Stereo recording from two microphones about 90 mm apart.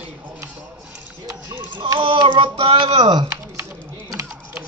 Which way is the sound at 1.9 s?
65° right (ahead or behind).